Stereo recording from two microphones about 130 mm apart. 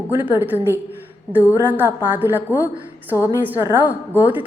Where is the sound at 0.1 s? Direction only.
15° right (ahead or behind).